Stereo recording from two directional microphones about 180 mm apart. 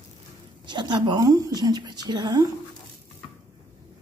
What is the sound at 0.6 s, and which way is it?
A woman's voice, 25° right (ahead or behind).